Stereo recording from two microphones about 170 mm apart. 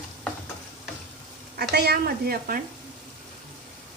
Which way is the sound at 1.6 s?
70° right (ahead or behind).